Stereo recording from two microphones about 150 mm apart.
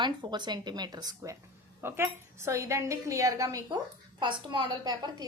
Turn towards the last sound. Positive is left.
turn(degrees=-25)  # may be behind; listen again after turning